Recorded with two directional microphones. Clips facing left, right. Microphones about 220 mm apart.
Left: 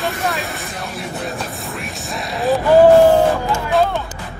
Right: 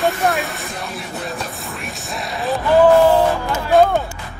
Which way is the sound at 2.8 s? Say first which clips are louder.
Left 2 dB; 45° left (ahead or behind).